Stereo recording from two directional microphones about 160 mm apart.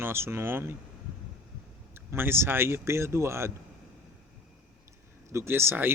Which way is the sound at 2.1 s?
15° right (ahead or behind).